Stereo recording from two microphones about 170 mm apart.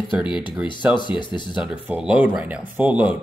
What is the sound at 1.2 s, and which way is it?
Speech, 25° left (ahead or behind).